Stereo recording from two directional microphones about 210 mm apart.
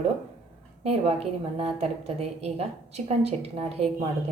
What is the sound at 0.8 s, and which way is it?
A woman's voice, 30° right (ahead or behind).